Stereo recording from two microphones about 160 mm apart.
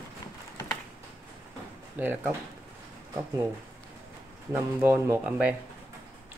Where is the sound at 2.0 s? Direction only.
10° right (ahead or behind).